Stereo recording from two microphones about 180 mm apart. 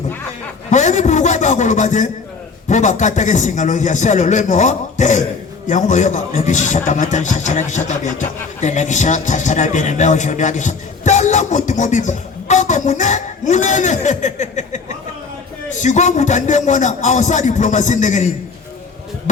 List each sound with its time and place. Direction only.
0.7 s a man's voice: 40° left (ahead or behind)
15.8 s a man's voice: 40° left (ahead or behind)